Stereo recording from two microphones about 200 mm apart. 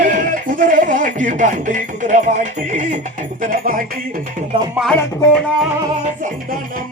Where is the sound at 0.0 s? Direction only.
40° right (ahead or behind).